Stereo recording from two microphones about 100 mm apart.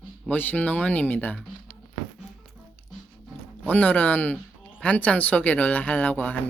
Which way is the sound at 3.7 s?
15° left (ahead or behind).